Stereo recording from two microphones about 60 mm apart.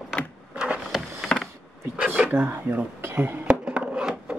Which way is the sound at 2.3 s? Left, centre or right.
Right.